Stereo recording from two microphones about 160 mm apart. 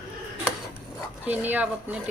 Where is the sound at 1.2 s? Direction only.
10° right (ahead or behind).